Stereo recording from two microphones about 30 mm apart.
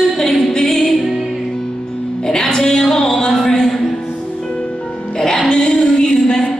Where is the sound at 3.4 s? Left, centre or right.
Centre.